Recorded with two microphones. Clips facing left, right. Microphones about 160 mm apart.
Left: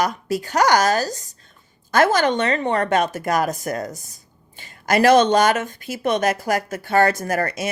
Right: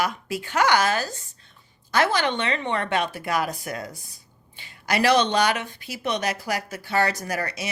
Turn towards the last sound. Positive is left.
turn(degrees=50)  # may be behind; listen again after turning